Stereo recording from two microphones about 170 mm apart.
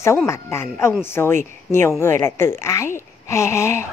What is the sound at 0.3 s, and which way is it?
A woman's voice, 15° left (ahead or behind).